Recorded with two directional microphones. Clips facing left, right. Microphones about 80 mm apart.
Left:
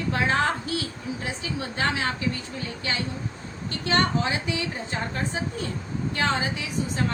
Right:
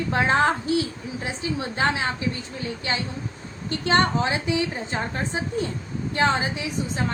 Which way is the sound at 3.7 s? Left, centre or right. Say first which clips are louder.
Right 3 dB; right.